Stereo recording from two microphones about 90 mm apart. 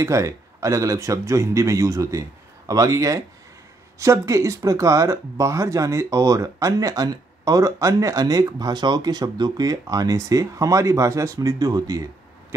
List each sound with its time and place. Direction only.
0.0 s speech: 35° right (ahead or behind)